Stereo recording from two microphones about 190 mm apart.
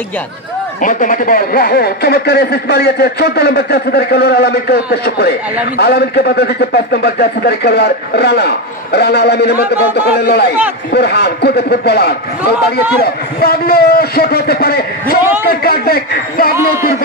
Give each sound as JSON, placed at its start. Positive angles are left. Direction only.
{"t": 0.7, "sound": "a man's voice", "side_deg": 45}